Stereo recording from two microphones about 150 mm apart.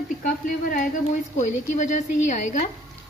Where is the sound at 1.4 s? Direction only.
55° left (ahead or behind).